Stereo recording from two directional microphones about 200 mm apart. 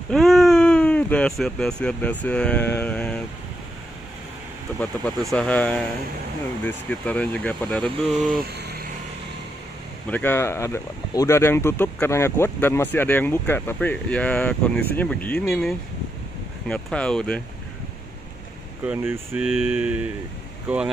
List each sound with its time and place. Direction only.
0.1 s speech: centre (ahead or behind)
4.7 s speech: 5° left (ahead or behind)
8.4 s vehicle: 50° right (ahead or behind)
10.0 s speech: 10° left (ahead or behind)
18.9 s speech: 5° right (ahead or behind)